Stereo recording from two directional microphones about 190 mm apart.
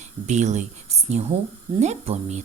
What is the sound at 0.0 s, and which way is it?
Speech, 40° right (ahead or behind).